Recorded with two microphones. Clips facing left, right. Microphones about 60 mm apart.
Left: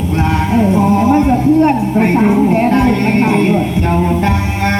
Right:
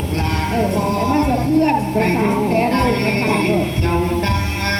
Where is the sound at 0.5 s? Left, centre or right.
Centre.